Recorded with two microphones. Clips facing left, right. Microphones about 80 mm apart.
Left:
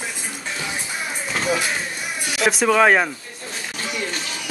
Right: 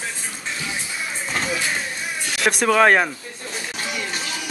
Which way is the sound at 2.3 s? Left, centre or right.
Centre.